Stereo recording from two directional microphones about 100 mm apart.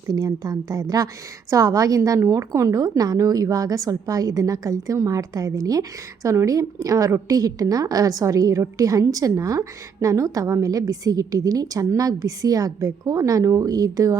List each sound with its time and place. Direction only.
0.1 s a woman's voice: 40° right (ahead or behind)